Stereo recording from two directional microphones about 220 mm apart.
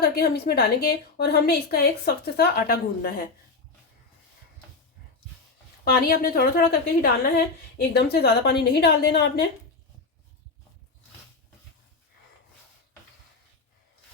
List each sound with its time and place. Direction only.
0.0 s a woman's voice: 45° left (ahead or behind)
5.8 s a woman's voice: 45° left (ahead or behind)